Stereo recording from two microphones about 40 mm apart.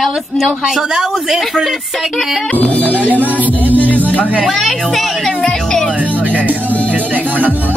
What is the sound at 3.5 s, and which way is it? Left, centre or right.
Music, right.